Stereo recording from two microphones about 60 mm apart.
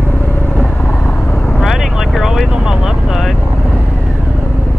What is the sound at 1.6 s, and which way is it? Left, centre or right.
Vehicle, centre.